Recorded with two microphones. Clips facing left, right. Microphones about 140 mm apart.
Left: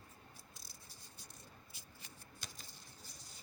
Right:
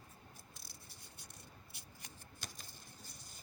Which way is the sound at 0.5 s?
60° right (ahead or behind).